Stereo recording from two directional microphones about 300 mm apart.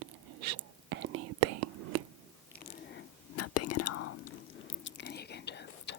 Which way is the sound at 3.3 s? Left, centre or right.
Left.